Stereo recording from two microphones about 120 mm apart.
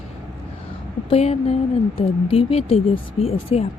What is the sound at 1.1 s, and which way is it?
Speech, 60° left (ahead or behind).